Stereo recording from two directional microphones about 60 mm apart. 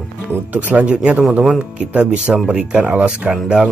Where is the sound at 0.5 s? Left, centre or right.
Right.